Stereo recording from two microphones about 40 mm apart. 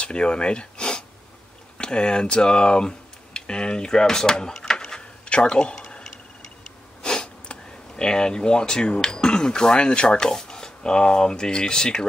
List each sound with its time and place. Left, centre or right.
0.0 s speech: left
7.0 s speech: left